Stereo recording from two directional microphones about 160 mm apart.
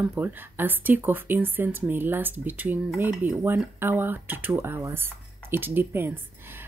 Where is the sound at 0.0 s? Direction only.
10° right (ahead or behind).